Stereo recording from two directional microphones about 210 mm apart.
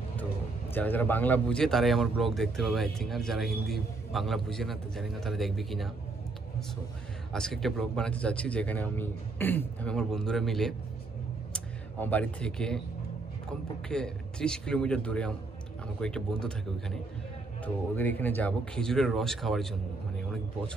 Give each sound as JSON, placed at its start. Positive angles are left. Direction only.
{"t": 0.7, "sound": "speech", "side_deg": 10}
{"t": 7.3, "sound": "speech", "side_deg": 0}
{"t": 20.2, "sound": "a sound", "side_deg": 5}